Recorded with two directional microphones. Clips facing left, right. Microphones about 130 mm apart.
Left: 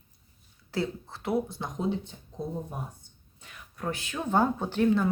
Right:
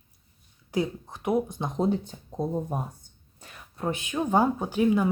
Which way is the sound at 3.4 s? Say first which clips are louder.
Right 4 dB; 25° right (ahead or behind).